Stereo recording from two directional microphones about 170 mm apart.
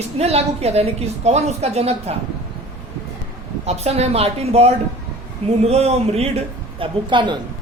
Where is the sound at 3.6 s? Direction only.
40° right (ahead or behind).